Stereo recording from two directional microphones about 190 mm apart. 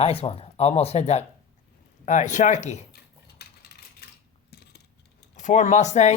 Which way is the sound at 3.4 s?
55° left (ahead or behind).